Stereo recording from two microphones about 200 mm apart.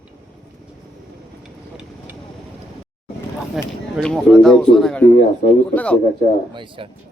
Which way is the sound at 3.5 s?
Centre (ahead or behind).